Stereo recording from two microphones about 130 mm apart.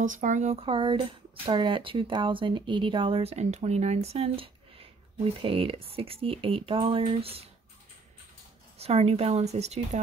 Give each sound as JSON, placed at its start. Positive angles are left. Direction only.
{"t": 0.0, "sound": "speech", "side_deg": -75}
{"t": 0.7, "sound": "speech", "side_deg": -40}
{"t": 8.7, "sound": "a woman's voice", "side_deg": -55}